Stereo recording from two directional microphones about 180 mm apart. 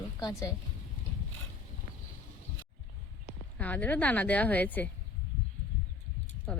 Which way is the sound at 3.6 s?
10° left (ahead or behind).